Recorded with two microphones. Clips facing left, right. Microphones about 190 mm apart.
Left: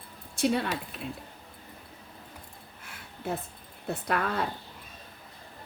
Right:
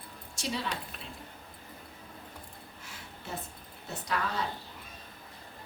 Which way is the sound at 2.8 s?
55° left (ahead or behind).